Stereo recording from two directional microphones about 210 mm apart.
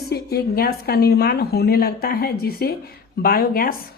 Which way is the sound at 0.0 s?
50° left (ahead or behind).